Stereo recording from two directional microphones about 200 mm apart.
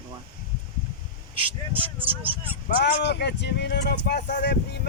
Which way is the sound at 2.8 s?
55° left (ahead or behind).